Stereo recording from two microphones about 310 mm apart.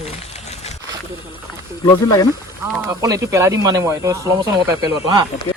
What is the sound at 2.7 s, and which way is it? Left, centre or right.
Speech, centre.